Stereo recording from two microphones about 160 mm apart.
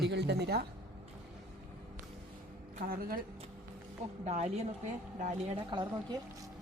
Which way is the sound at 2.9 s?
65° right (ahead or behind).